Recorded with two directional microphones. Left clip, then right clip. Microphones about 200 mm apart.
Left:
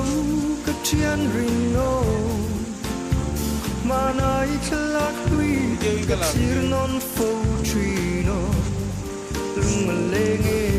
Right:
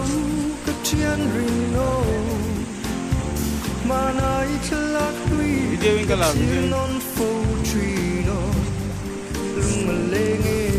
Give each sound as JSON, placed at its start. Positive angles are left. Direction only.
{"t": 0.9, "sound": "music", "side_deg": 0}
{"t": 3.8, "sound": "music", "side_deg": 0}
{"t": 9.6, "sound": "music", "side_deg": 0}